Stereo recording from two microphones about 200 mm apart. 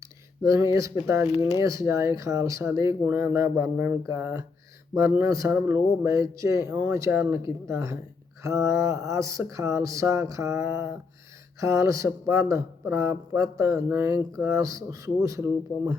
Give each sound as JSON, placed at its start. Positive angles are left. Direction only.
{"t": 0.4, "sound": "a man's voice", "side_deg": -15}
{"t": 1.3, "sound": "speech", "side_deg": 30}
{"t": 1.5, "sound": "a man's voice", "side_deg": -15}